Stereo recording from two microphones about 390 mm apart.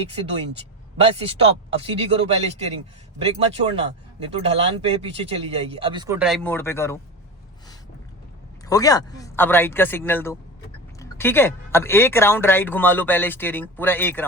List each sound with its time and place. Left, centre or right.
0.9 s a man's voice: centre
8.6 s speech: centre